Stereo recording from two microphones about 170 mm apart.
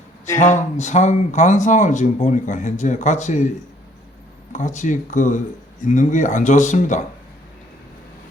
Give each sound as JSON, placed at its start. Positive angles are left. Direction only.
{"t": 0.3, "sound": "speech", "side_deg": 45}
{"t": 4.5, "sound": "speech", "side_deg": 45}